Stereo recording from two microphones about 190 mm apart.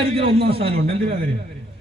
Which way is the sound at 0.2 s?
30° right (ahead or behind).